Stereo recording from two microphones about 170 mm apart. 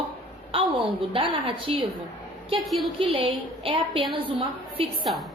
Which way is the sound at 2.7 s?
Centre (ahead or behind).